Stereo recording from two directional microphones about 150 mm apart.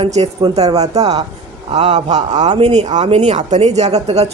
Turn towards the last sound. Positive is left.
turn(degrees=-45)  # may be behind; listen again after turning